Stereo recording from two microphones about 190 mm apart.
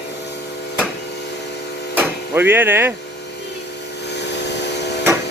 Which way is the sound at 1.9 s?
10° right (ahead or behind).